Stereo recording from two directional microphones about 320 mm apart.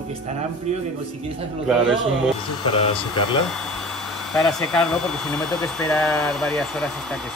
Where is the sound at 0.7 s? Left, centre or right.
Right.